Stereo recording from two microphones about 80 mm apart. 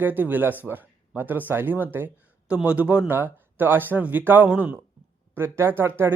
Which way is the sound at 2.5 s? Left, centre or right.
Centre.